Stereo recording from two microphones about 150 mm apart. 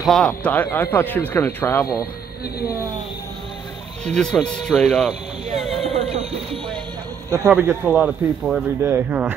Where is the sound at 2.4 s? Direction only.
90° left.